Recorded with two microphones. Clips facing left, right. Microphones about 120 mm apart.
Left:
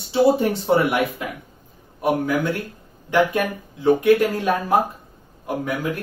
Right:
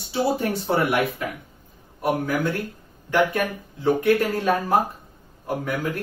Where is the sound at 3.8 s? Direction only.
15° left (ahead or behind).